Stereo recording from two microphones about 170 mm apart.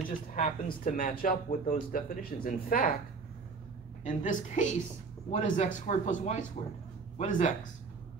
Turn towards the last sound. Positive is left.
turn(degrees=45)  # may be behind; listen again after turning